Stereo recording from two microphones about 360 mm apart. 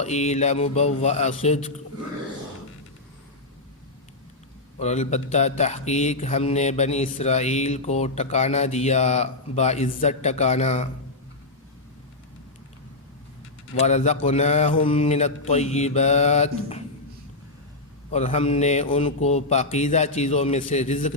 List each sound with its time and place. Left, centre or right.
0.0 s speech: centre
4.8 s speech: centre
13.7 s speech: centre
18.1 s speech: centre